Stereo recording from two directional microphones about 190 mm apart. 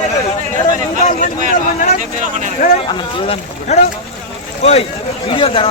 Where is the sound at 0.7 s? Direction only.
40° left (ahead or behind).